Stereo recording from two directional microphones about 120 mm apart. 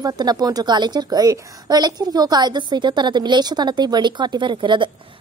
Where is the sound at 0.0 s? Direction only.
35° right (ahead or behind).